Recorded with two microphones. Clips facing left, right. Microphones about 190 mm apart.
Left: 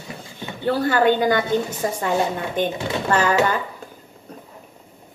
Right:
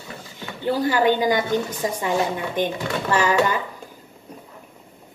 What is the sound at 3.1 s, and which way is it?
Speech, 15° right (ahead or behind).